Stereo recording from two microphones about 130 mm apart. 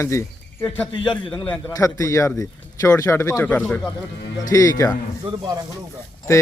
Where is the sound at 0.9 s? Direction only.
40° left (ahead or behind).